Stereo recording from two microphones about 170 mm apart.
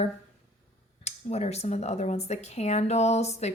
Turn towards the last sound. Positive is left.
turn(degrees=40)  # may be behind; listen again after turning